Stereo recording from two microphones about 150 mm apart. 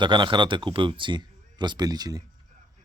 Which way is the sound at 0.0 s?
30° right (ahead or behind).